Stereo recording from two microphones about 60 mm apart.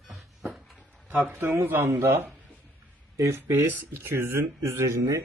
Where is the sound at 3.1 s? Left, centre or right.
Right.